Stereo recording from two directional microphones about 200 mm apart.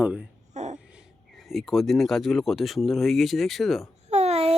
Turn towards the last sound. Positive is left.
turn(degrees=-30)  # may be behind; listen again after turning